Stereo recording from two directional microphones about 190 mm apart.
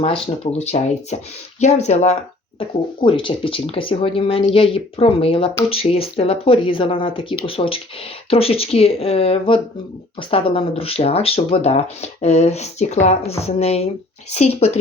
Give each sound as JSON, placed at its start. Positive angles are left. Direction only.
{"t": 0.0, "sound": "speech", "side_deg": 30}